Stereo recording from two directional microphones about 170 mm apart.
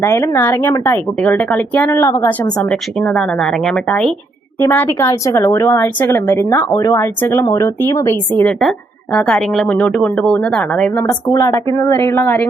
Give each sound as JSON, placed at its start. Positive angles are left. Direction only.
{"t": 0.0, "sound": "speech", "side_deg": 15}
{"t": 2.6, "sound": "speech", "side_deg": 5}
{"t": 8.4, "sound": "speech", "side_deg": 5}
{"t": 11.0, "sound": "speech", "side_deg": 20}